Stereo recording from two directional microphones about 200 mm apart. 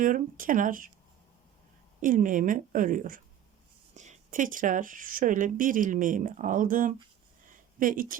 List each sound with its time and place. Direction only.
0.0 s speech: 40° right (ahead or behind)
2.0 s speech: 40° right (ahead or behind)
7.4 s a sound: 40° right (ahead or behind)